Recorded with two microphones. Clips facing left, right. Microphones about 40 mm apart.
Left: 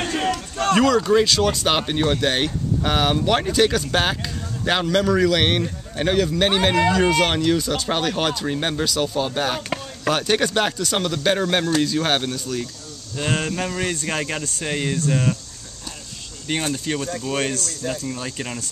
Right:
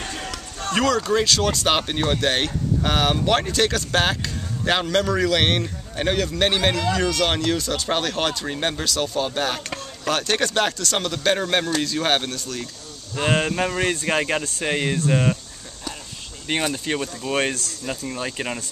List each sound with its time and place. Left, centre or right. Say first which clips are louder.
0.0 s run: left 8 dB; left
0.7 s speech: left 2 dB; centre
7.0 s speech: left 4 dB; centre
7.2 s speech: left 2 dB; centre
13.1 s speech: right 2 dB; centre
16.7 s speech: left 1 dB; centre